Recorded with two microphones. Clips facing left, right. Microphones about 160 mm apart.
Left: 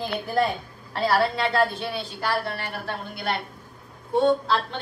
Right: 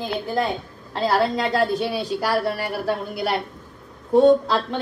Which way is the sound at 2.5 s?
10° right (ahead or behind).